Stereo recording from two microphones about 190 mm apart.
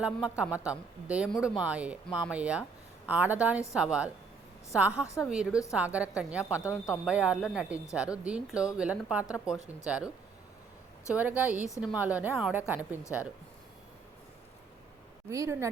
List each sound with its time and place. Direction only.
0.0 s a woman's voice: 5° right (ahead or behind)
5.0 s a woman's voice: 15° left (ahead or behind)
5.3 s a woman's voice: 5° right (ahead or behind)
11.1 s a woman's voice: 10° right (ahead or behind)
15.3 s a woman's voice: 15° right (ahead or behind)